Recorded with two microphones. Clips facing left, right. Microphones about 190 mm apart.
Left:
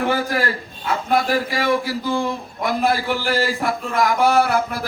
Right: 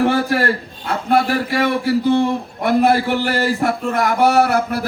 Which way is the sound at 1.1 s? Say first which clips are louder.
Right 4 dB; 65° right (ahead or behind).